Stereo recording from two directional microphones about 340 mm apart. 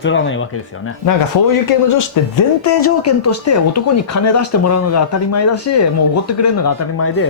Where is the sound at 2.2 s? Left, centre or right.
Left.